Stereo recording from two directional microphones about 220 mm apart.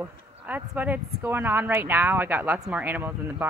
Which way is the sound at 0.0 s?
10° right (ahead or behind).